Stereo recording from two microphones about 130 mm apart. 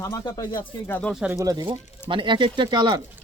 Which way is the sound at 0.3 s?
30° left (ahead or behind).